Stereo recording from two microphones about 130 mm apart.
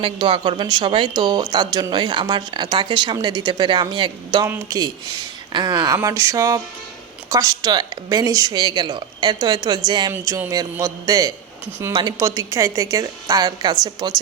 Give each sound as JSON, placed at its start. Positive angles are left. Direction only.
{"t": 0.0, "sound": "a woman's voice", "side_deg": -40}
{"t": 10.1, "sound": "a woman's voice", "side_deg": -20}